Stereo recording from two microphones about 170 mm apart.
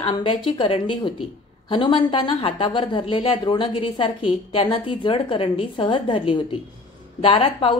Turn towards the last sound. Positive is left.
turn(degrees=30)  # may be behind; listen again after turning